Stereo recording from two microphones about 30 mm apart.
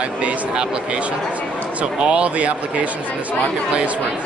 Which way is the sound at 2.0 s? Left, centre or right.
Right.